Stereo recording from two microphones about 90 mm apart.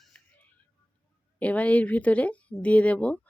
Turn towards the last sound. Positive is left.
turn(degrees=15)  # may be behind; listen again after turning